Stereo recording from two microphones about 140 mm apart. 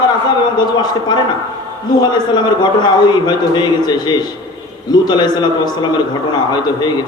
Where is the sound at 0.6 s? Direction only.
30° left (ahead or behind).